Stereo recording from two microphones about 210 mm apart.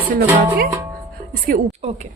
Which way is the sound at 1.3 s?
40° right (ahead or behind).